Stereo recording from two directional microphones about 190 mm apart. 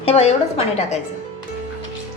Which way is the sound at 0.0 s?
35° left (ahead or behind).